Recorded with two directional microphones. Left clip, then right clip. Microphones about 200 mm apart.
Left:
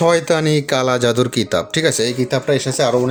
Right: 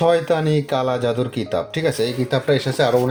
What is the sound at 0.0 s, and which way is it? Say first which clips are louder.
Speech: left 2 dB; 30° left (ahead or behind).